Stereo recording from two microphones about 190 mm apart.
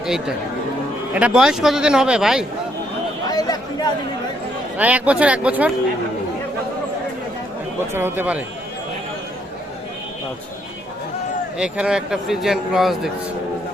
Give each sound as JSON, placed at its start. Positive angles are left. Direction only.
{"t": 0.0, "sound": "a man's voice", "side_deg": -5}
{"t": 3.2, "sound": "chatter", "side_deg": 20}
{"t": 4.8, "sound": "speech", "side_deg": -5}
{"t": 7.8, "sound": "speech", "side_deg": -10}
{"t": 11.5, "sound": "a man's voice", "side_deg": -5}